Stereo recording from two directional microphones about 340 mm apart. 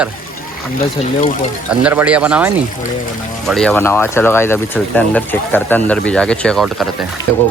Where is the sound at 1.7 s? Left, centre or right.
Centre.